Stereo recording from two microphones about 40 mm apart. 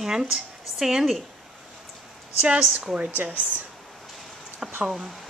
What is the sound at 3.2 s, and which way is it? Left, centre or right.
Speech, right.